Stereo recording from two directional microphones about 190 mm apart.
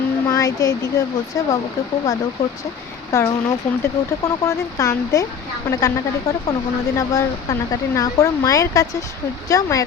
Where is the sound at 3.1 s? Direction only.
15° left (ahead or behind).